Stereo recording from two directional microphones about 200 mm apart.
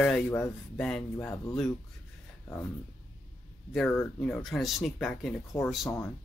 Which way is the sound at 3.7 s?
5° left (ahead or behind).